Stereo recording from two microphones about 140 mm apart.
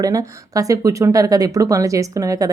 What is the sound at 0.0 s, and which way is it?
A woman's voice, 25° right (ahead or behind).